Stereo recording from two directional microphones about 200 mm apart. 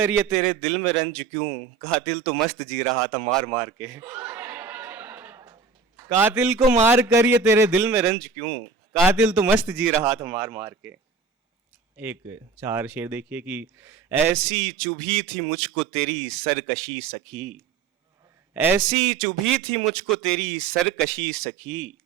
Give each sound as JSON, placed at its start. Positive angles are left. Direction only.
{"t": 0.5, "sound": "a man's voice", "side_deg": 5}
{"t": 3.6, "sound": "a sound", "side_deg": -15}
{"t": 6.0, "sound": "a man's voice", "side_deg": -15}
{"t": 8.1, "sound": "a man's voice", "side_deg": 5}
{"t": 9.0, "sound": "speech", "side_deg": -10}
{"t": 11.9, "sound": "speech", "side_deg": -10}
{"t": 14.3, "sound": "a man's voice", "side_deg": 5}
{"t": 18.5, "sound": "speech", "side_deg": -10}
{"t": 18.9, "sound": "a man's voice", "side_deg": 5}